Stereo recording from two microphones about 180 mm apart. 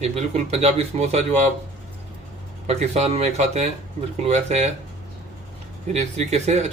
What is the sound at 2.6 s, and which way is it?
A man's voice, 35° right (ahead or behind).